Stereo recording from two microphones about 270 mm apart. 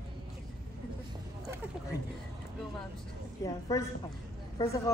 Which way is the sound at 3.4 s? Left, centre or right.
Centre.